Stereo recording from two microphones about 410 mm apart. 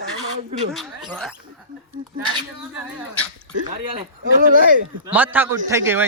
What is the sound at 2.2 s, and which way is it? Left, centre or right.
Speech, centre.